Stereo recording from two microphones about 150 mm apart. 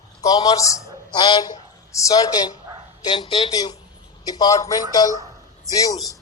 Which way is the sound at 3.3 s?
40° left (ahead or behind).